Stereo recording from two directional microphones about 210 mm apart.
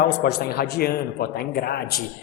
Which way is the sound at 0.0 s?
50° left (ahead or behind).